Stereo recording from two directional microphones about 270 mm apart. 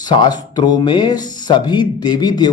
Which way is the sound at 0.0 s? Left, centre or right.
Centre.